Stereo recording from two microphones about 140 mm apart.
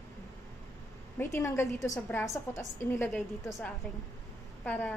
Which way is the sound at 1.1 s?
20° left (ahead or behind).